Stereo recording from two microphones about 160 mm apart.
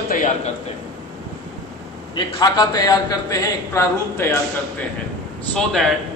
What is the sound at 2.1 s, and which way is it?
A man's voice, 25° left (ahead or behind).